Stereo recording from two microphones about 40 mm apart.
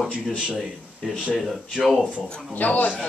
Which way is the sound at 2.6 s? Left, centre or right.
Left.